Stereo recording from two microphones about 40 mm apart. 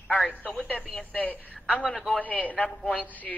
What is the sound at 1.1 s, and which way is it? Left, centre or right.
A woman's voice, left.